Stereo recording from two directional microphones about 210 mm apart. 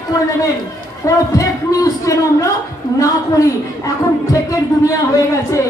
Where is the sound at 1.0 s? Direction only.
15° left (ahead or behind).